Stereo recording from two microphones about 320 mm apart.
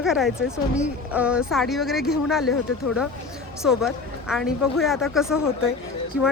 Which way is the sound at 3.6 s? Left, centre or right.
Centre.